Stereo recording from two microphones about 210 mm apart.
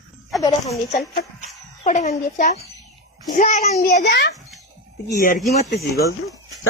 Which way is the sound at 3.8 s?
45° left (ahead or behind).